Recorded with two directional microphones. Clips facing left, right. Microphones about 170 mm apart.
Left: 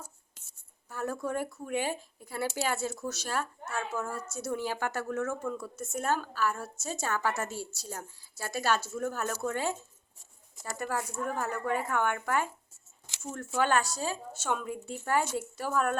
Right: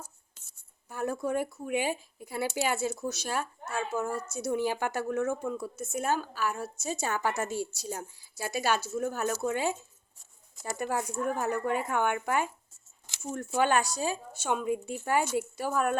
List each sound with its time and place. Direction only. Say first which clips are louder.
0.9 s speech: right 3 dB; 15° right (ahead or behind)